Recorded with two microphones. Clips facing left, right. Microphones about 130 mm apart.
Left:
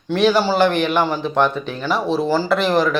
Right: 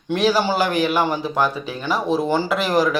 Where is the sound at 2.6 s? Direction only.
10° right (ahead or behind).